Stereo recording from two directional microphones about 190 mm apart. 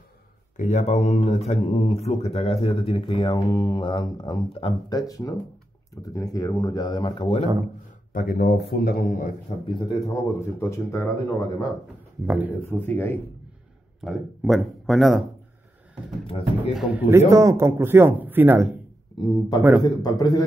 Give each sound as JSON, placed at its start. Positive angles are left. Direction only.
{"t": 0.6, "sound": "speech", "side_deg": 40}
{"t": 8.1, "sound": "speech", "side_deg": 50}
{"t": 9.7, "sound": "speech", "side_deg": 25}
{"t": 12.3, "sound": "speech", "side_deg": -10}
{"t": 12.6, "sound": "speech", "side_deg": 10}
{"t": 14.0, "sound": "a man's voice", "side_deg": 0}
{"t": 16.3, "sound": "speech", "side_deg": 30}
{"t": 16.7, "sound": "speech", "side_deg": -5}
{"t": 19.1, "sound": "speech", "side_deg": 20}